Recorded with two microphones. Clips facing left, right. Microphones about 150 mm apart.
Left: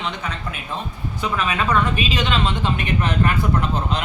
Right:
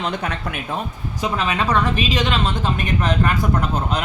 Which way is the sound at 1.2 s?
35° right (ahead or behind).